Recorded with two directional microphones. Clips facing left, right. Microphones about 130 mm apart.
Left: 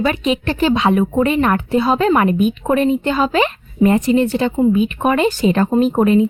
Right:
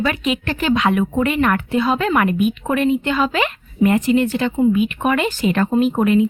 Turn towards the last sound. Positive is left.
turn(degrees=35)  # may be behind; listen again after turning